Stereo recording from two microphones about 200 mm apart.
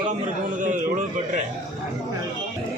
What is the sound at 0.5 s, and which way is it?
Speech, 40° right (ahead or behind).